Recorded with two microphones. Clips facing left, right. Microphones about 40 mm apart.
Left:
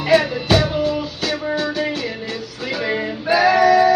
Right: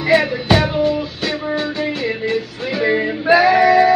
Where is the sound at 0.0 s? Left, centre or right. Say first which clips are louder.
Right 1 dB; right.